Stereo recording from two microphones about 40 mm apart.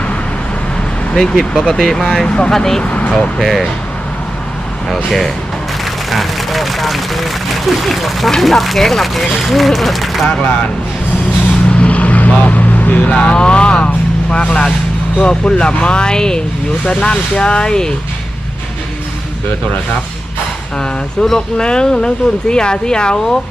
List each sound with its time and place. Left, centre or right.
1.1 s speech: centre
2.2 s speech: left
2.5 s speech: centre
2.8 s vehicle: left
3.1 s speech: centre
3.4 s speech: centre
5.8 s speech: centre
10.2 s speech: left
11.8 s vehicle: left
13.1 s speech: left
21.2 s speech: centre